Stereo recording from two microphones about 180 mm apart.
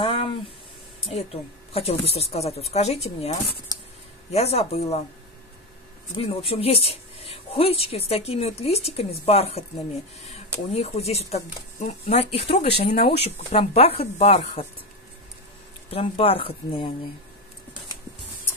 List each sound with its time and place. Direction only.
0.0 s a sound: 30° left (ahead or behind)
1.0 s speech: 35° left (ahead or behind)
6.1 s speech: 30° left (ahead or behind)
10.7 s speech: 35° left (ahead or behind)
15.9 s speech: 30° left (ahead or behind)